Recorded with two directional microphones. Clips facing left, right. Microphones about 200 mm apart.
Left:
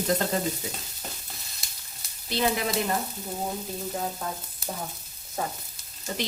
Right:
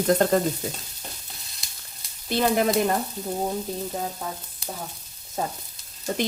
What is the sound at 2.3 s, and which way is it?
Speech, 50° right (ahead or behind).